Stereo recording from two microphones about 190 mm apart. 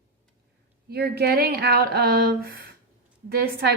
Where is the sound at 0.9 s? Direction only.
55° right (ahead or behind).